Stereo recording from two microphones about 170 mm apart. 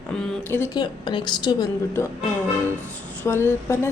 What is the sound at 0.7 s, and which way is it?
A woman's voice, 25° left (ahead or behind).